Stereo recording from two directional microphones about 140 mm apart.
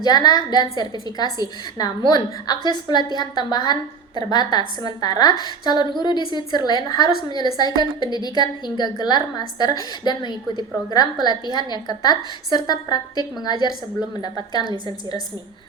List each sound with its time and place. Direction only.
0.0 s a woman's voice: 30° left (ahead or behind)